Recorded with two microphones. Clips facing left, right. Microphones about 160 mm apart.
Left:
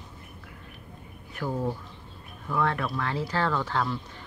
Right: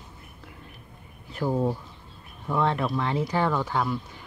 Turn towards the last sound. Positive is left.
turn(degrees=-10)  # may be behind; listen again after turning